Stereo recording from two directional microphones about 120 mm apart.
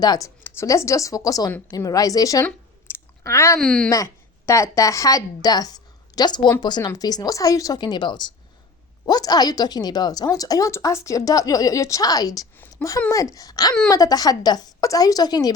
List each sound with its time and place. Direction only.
0.0 s speech: 30° left (ahead or behind)
0.4 s a woman's voice: 20° left (ahead or behind)
2.4 s a sound: 20° left (ahead or behind)
3.6 s speech: 5° left (ahead or behind)
3.8 s a woman's voice: 25° left (ahead or behind)